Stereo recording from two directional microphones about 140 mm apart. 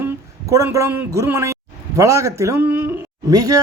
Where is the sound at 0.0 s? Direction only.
20° right (ahead or behind).